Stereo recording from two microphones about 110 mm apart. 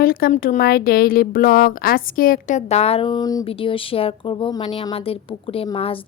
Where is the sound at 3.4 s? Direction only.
55° left (ahead or behind).